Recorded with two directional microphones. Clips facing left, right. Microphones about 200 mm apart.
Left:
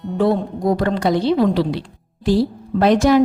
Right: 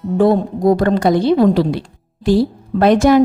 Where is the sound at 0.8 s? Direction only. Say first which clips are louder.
Right 4 dB; 50° right (ahead or behind).